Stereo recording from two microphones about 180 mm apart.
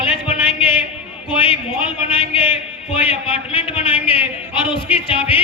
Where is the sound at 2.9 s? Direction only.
30° left (ahead or behind).